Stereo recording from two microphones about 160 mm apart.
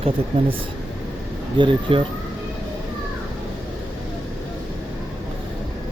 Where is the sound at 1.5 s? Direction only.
30° right (ahead or behind).